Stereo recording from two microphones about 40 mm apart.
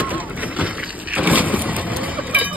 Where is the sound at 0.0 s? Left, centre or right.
Right.